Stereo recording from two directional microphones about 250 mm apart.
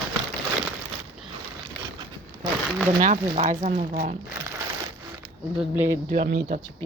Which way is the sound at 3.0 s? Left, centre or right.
Right.